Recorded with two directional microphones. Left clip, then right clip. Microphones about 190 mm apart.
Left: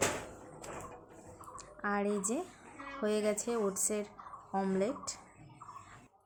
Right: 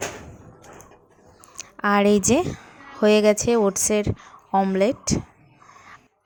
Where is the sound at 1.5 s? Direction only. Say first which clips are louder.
Right 15 dB; 50° right (ahead or behind).